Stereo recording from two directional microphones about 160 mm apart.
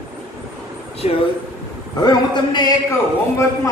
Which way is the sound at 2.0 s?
25° left (ahead or behind).